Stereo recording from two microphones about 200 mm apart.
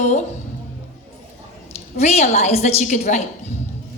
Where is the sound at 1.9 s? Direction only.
35° left (ahead or behind).